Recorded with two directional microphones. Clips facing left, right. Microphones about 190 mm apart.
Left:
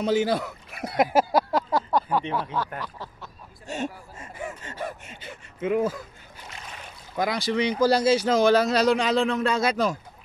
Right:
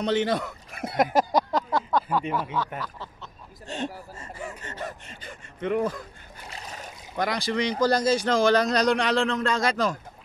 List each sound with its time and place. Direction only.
0.0 s speech: 5° left (ahead or behind)
1.1 s a sound: 10° left (ahead or behind)
2.8 s speech: 10° left (ahead or behind)
6.5 s boat: 40° right (ahead or behind)
7.2 s speech: 5° left (ahead or behind)